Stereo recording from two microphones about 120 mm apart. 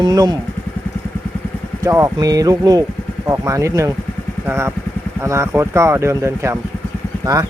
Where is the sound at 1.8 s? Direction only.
30° right (ahead or behind).